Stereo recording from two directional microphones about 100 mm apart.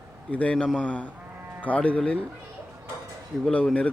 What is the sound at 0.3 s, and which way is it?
Speech, 15° left (ahead or behind).